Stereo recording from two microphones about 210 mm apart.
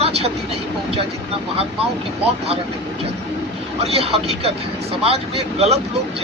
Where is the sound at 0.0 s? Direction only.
30° right (ahead or behind).